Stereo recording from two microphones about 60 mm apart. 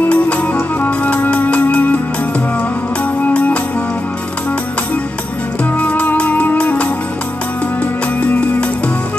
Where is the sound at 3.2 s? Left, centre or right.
Left.